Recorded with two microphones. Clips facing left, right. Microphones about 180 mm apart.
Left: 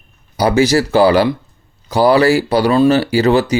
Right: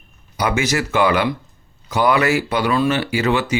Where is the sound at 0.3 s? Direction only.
35° left (ahead or behind).